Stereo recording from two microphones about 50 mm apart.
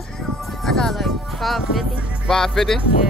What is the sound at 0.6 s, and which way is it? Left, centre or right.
Speech, centre.